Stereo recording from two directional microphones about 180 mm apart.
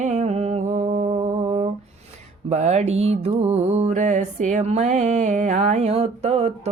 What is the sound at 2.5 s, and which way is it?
Mantra, 40° right (ahead or behind).